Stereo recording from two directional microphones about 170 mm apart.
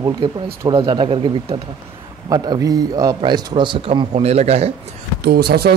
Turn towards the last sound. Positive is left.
turn(degrees=-70)  # may be behind; listen again after turning